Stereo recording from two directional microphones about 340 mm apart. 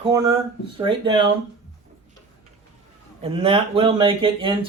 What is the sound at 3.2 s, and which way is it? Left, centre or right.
Speech, centre.